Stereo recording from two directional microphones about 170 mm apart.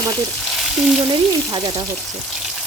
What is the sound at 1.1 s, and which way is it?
Speech, 25° right (ahead or behind).